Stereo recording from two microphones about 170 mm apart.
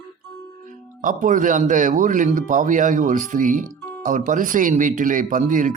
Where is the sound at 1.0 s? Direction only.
50° right (ahead or behind).